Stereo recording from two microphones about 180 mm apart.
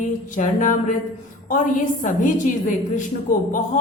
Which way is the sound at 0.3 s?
45° left (ahead or behind).